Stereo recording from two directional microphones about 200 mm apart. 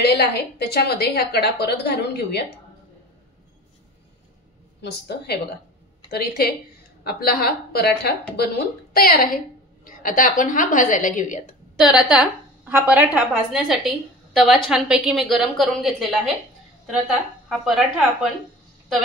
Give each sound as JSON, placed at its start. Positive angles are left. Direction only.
{"t": 0.0, "sound": "a woman's voice", "side_deg": 55}
{"t": 5.0, "sound": "a woman's voice", "side_deg": 55}
{"t": 11.9, "sound": "a woman's voice", "side_deg": -5}
{"t": 17.5, "sound": "a woman's voice", "side_deg": 0}